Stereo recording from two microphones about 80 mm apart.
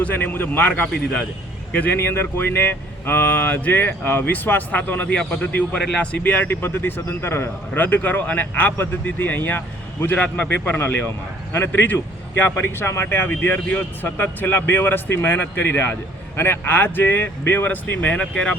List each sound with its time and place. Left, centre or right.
0.0 s a man's voice: left
1.7 s a man's voice: left